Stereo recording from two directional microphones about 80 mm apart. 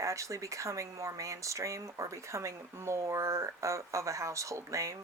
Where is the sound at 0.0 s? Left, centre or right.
Right.